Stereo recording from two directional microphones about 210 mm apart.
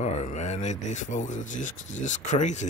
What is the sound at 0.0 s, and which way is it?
Speech, 35° left (ahead or behind).